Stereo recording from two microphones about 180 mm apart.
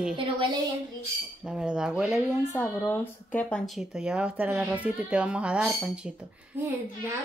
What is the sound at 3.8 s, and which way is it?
Speech, 5° right (ahead or behind).